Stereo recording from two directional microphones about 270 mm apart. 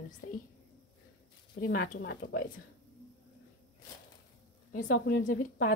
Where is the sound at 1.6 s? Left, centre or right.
Left.